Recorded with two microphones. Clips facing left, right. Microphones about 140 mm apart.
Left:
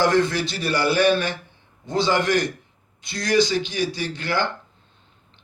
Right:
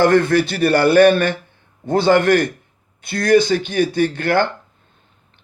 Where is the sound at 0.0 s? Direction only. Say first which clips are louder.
Right 6 dB; 55° right (ahead or behind).